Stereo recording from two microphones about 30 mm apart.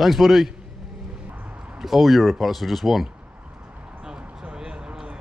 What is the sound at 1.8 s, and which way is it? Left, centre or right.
Speech, centre.